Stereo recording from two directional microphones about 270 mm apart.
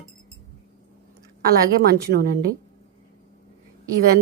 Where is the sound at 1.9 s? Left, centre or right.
Right.